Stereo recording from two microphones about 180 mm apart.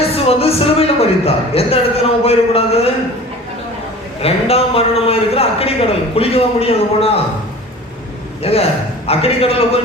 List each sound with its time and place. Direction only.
0.0 s a man's voice: 35° left (ahead or behind)
4.2 s a man's voice: 35° left (ahead or behind)
8.5 s a man's voice: 35° left (ahead or behind)